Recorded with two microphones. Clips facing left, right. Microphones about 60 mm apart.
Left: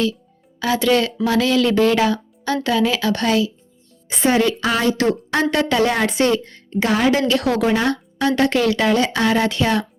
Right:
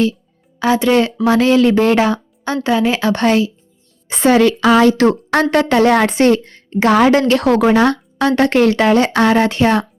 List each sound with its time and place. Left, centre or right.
0.6 s speech: right
4.3 s a woman's voice: right
4.9 s a woman's voice: right
7.6 s speech: right
8.3 s speech: right